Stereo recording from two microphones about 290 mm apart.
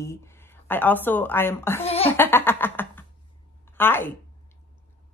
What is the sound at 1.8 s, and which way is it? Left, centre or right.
Laughter, centre.